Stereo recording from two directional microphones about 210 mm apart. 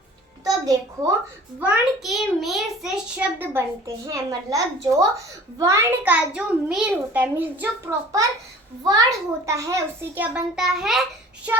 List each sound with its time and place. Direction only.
0.4 s a child's voice: 15° right (ahead or behind)
8.8 s a child's voice: 15° right (ahead or behind)